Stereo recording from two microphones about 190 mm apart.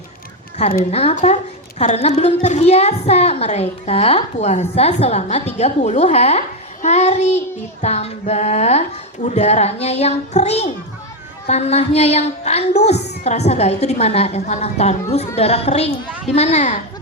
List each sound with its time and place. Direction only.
0.9 s a child's voice: 35° left (ahead or behind)